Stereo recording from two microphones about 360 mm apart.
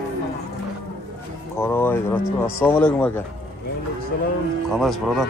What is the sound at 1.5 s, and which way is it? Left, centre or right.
Speech, centre.